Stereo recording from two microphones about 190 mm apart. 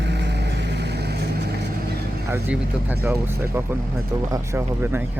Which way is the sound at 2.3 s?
10° right (ahead or behind).